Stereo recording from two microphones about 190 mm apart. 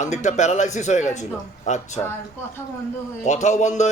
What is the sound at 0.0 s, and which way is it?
A man's voice, 40° left (ahead or behind).